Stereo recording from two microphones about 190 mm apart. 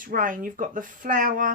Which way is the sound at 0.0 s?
45° right (ahead or behind).